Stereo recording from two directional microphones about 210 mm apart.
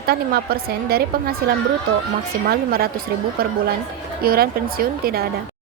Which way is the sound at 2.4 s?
45° right (ahead or behind).